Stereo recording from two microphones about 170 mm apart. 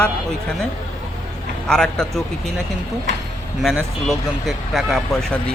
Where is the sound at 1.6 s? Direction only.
5° left (ahead or behind).